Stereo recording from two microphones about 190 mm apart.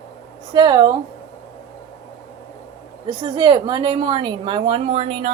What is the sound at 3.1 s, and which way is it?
A woman's voice, 25° right (ahead or behind).